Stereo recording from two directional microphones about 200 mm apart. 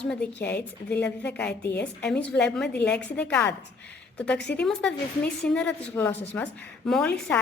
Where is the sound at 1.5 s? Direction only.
55° left (ahead or behind).